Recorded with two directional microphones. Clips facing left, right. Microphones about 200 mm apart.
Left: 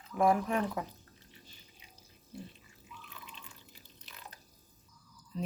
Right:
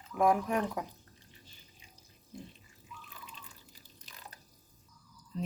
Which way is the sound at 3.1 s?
40° right (ahead or behind).